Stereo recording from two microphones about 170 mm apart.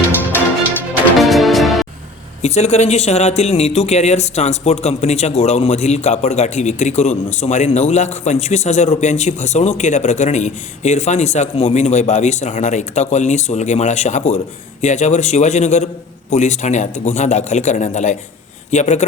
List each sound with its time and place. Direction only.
1.2 s music: centre (ahead or behind)
2.4 s speech: 40° left (ahead or behind)